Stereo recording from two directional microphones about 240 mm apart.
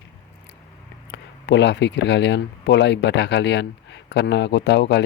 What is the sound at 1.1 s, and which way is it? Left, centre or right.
Speech, left.